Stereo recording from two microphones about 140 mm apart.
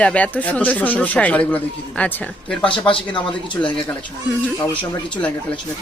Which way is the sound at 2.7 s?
35° left (ahead or behind).